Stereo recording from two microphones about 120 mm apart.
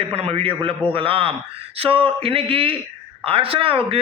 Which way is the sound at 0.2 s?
55° right (ahead or behind).